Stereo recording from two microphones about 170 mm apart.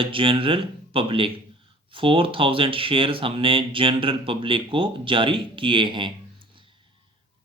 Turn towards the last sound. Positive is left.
turn(degrees=-30)  # may be behind; listen again after turning